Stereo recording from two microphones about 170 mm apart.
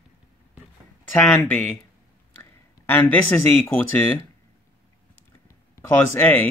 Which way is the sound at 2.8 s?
10° left (ahead or behind).